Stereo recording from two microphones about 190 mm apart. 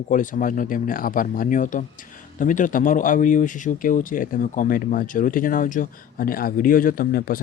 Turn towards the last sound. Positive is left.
turn(degrees=50)  # may be behind; listen again after turning